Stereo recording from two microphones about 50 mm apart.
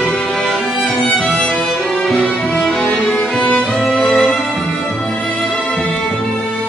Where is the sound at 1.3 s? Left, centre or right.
Centre.